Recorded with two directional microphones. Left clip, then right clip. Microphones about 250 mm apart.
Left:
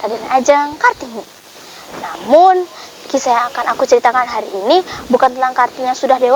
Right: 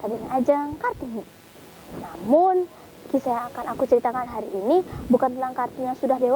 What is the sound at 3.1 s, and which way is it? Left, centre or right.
Speech, centre.